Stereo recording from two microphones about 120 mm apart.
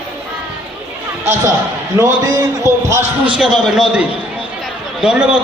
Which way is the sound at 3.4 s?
5° right (ahead or behind).